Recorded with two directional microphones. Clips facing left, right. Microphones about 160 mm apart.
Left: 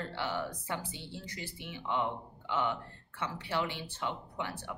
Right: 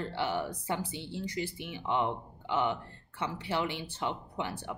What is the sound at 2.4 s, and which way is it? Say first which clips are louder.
Speech: right 3 dB; 15° right (ahead or behind).